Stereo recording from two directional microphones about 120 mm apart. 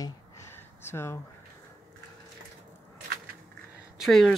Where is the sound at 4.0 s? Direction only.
Centre (ahead or behind).